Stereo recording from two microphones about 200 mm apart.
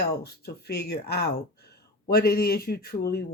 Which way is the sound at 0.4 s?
50° left (ahead or behind).